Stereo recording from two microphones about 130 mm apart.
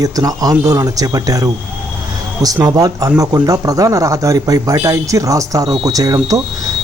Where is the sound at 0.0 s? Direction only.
30° right (ahead or behind).